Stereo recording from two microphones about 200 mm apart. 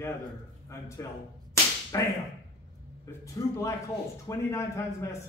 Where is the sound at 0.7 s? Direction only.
15° left (ahead or behind).